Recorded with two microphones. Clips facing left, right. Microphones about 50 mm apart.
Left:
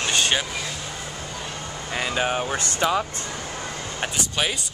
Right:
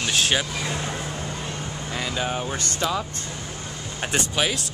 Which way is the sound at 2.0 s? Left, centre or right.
Left.